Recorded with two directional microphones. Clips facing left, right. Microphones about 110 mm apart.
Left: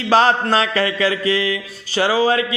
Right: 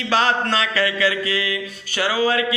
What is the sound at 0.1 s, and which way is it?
Mantra, 40° left (ahead or behind).